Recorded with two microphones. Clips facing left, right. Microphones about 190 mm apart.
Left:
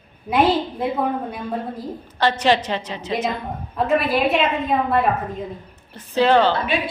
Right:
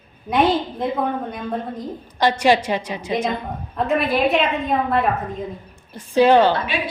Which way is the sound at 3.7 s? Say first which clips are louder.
Even; centre (ahead or behind).